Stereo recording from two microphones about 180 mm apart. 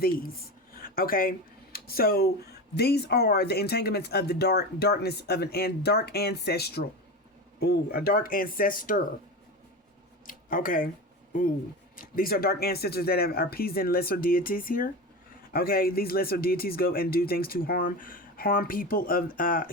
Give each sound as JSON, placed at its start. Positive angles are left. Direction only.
{"t": 0.8, "sound": "speech", "side_deg": 55}
{"t": 10.2, "sound": "speech", "side_deg": 50}
{"t": 11.9, "sound": "speech", "side_deg": 55}